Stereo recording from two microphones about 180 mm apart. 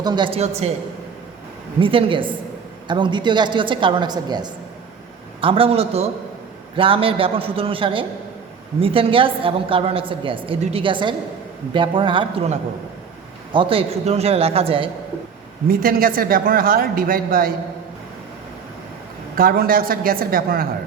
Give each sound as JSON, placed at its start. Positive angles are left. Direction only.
{"t": 0.0, "sound": "a woman's voice", "side_deg": -25}
{"t": 1.8, "sound": "a woman's voice", "side_deg": -30}
{"t": 15.6, "sound": "a man's voice", "side_deg": -55}
{"t": 19.4, "sound": "a man's voice", "side_deg": -55}